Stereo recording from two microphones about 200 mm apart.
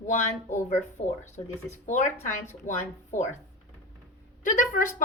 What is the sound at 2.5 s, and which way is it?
Speech, 40° left (ahead or behind).